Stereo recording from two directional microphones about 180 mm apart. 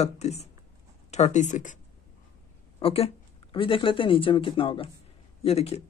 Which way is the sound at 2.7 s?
30° left (ahead or behind).